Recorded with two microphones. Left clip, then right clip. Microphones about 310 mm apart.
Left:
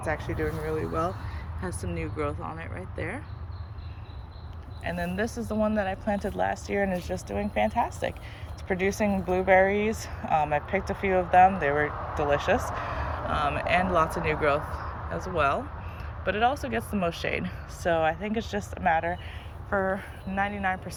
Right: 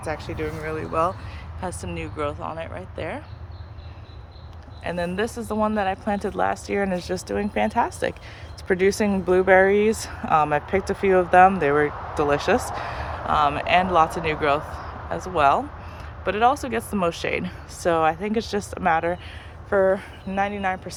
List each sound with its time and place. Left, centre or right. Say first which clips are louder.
0.3 s speech: right 1 dB; centre
1.6 s speech: right 4 dB; centre
4.8 s speech: right 5 dB; centre